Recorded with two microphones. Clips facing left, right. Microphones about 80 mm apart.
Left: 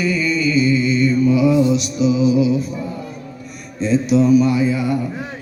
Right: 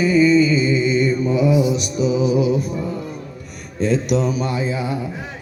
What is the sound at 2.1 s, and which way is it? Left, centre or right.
Music, right.